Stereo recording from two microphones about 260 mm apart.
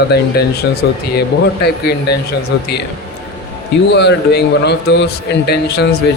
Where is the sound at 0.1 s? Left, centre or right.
Left.